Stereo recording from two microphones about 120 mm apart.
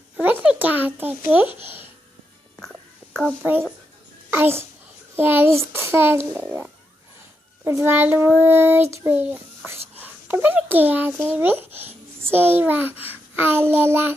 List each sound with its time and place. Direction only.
0.2 s a child's voice: 15° right (ahead or behind)
3.0 s a sound: 15° right (ahead or behind)
4.3 s a child's voice: 20° right (ahead or behind)